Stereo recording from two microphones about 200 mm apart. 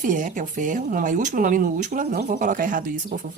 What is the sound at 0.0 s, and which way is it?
Speech, 40° right (ahead or behind).